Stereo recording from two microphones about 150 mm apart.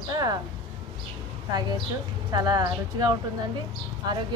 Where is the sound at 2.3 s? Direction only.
25° right (ahead or behind).